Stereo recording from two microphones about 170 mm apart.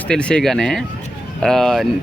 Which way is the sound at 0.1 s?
5° left (ahead or behind).